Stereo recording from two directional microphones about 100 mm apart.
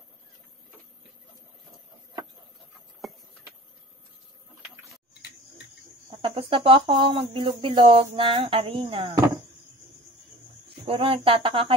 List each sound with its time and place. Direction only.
3.1 s a sound: centre (ahead or behind)
6.0 s speech: 60° right (ahead or behind)
10.9 s speech: 65° right (ahead or behind)